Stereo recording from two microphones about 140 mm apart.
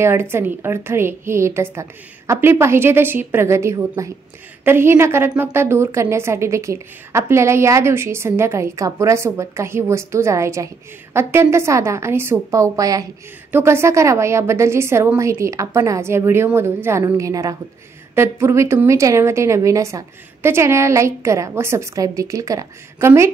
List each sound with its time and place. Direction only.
0.0 s a woman's voice: 15° right (ahead or behind)